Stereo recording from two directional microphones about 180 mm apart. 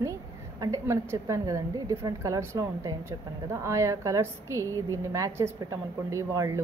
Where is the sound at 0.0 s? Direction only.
20° right (ahead or behind).